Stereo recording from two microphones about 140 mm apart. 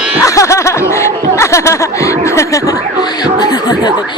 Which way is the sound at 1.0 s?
20° left (ahead or behind).